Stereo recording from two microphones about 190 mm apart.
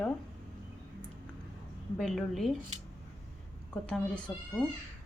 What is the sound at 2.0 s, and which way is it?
Speech, centre (ahead or behind).